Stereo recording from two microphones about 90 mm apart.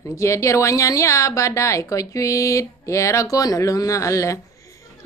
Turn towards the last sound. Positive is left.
turn(degrees=35)  # may be behind; listen again after turning